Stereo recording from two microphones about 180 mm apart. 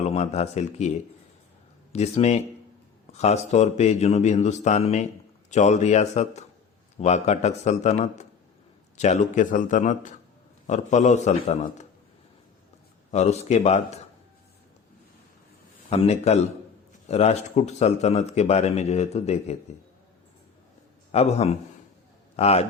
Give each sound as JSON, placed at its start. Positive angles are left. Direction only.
{"t": 0.0, "sound": "a man's voice", "side_deg": 35}
{"t": 13.1, "sound": "a man's voice", "side_deg": 40}
{"t": 15.9, "sound": "a man's voice", "side_deg": 35}
{"t": 21.1, "sound": "a man's voice", "side_deg": 35}